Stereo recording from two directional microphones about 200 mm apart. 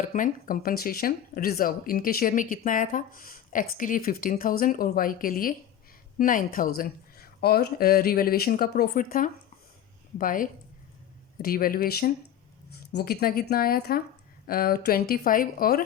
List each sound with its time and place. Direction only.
0.0 s speech: 40° left (ahead or behind)